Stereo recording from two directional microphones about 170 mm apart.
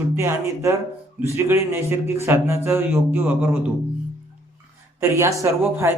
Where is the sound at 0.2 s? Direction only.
15° right (ahead or behind).